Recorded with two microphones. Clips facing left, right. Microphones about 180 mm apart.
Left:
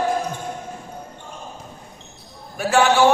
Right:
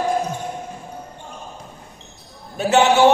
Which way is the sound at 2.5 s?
20° right (ahead or behind).